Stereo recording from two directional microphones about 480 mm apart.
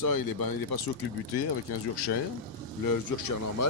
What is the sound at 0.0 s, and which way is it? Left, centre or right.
Speech, left.